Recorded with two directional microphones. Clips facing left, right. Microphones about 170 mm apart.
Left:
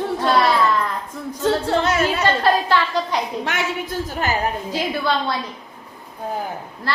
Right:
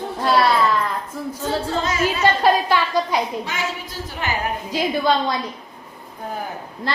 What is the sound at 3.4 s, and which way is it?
Speech, 65° left (ahead or behind).